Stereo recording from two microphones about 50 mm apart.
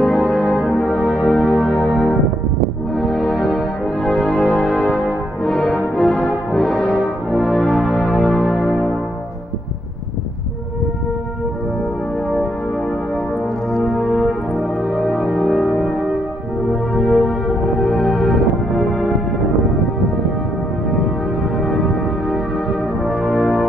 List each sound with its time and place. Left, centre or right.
0.5 s brass instrument: centre
0.7 s music: centre
6.5 s brass instrument: centre
7.2 s music: centre
13.7 s music: centre
21.5 s music: centre